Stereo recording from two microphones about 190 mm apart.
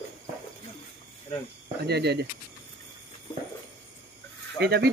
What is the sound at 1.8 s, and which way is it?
Speech, 60° right (ahead or behind).